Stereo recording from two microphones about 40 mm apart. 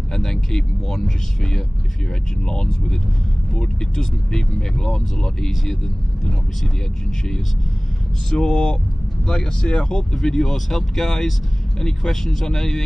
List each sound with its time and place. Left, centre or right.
0.1 s vehicle: centre
2.4 s speech: centre
8.3 s speech: centre